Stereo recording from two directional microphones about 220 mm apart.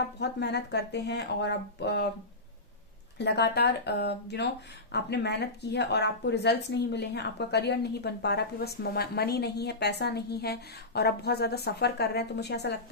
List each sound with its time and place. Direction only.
0.2 s speech: 50° left (ahead or behind)
3.2 s speech: 50° left (ahead or behind)